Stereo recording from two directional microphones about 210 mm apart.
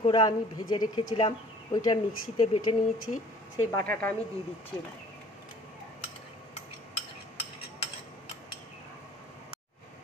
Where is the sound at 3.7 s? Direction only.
10° left (ahead or behind).